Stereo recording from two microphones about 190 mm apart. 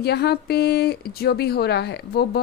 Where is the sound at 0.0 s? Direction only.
60° left (ahead or behind).